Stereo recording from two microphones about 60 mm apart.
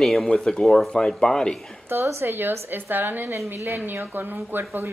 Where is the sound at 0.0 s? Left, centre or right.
Centre.